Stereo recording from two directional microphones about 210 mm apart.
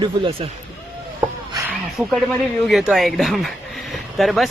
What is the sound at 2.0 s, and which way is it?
Speech, 5° right (ahead or behind).